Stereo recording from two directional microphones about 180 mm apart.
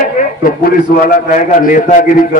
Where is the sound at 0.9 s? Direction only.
50° left (ahead or behind).